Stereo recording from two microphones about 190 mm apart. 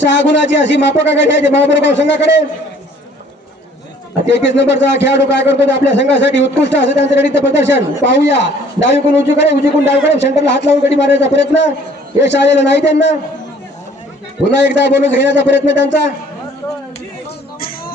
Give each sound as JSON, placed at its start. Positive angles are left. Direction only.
{"t": 0.0, "sound": "a man's voice", "side_deg": 70}
{"t": 4.3, "sound": "a man's voice", "side_deg": 65}
{"t": 14.4, "sound": "a man's voice", "side_deg": 70}